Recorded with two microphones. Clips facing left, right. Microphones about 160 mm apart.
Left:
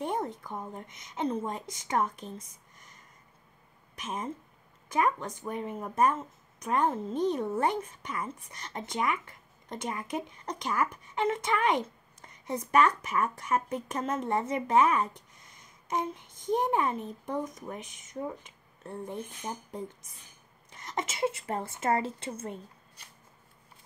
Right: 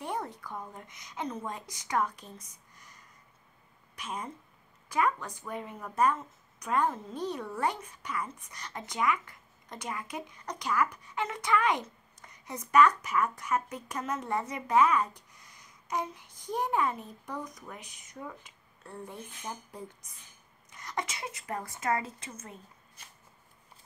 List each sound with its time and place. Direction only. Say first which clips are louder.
0.0 s speech: left 4 dB; 25° left (ahead or behind)
2.4 s a sound: even; 25° left (ahead or behind)
4.0 s speech: left 3 dB; 25° left (ahead or behind)